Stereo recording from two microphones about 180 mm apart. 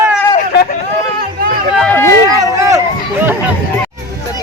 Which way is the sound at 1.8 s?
10° left (ahead or behind).